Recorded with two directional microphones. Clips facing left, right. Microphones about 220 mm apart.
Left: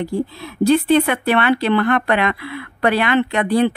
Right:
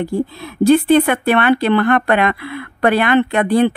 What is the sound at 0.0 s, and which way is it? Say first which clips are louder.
Speech: right 2 dB; 50° right (ahead or behind).